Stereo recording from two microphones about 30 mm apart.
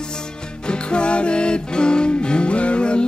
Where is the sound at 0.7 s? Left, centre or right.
Left.